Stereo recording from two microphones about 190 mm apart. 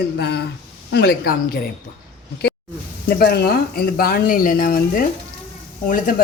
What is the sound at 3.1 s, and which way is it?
Speech, 55° left (ahead or behind).